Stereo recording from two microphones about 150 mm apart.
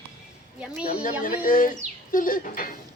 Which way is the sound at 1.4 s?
65° left (ahead or behind).